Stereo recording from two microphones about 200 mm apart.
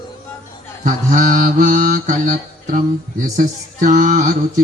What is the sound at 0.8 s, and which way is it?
Mantra, 40° right (ahead or behind).